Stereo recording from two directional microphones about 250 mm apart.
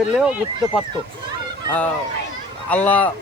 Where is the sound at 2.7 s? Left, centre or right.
Centre.